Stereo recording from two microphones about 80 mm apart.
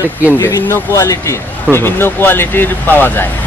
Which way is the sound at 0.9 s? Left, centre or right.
Left.